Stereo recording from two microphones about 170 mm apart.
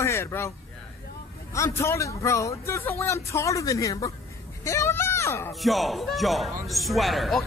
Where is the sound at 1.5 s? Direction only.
15° left (ahead or behind).